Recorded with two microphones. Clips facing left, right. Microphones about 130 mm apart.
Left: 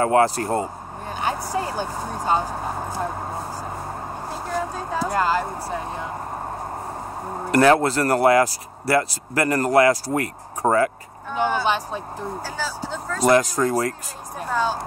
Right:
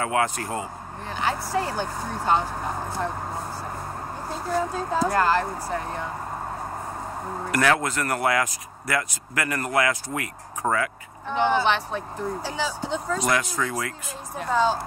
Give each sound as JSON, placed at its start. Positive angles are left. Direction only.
{"t": 0.0, "sound": "speech", "side_deg": 35}
{"t": 1.2, "sound": "speech", "side_deg": 20}
{"t": 4.3, "sound": "speech", "side_deg": 10}
{"t": 7.5, "sound": "speech", "side_deg": 30}
{"t": 11.3, "sound": "speech", "side_deg": 10}
{"t": 13.2, "sound": "speech", "side_deg": 35}
{"t": 14.4, "sound": "speech", "side_deg": 10}